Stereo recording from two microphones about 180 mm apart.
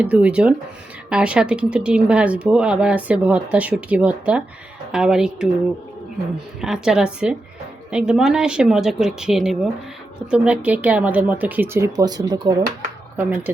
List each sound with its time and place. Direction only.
0.0 s speech: 10° right (ahead or behind)
6.6 s speech: 5° right (ahead or behind); by 12.6 s 20° right (ahead or behind)
13.1 s speech: 10° right (ahead or behind)